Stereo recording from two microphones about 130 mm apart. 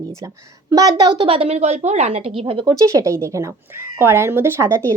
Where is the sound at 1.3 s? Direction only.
50° right (ahead or behind).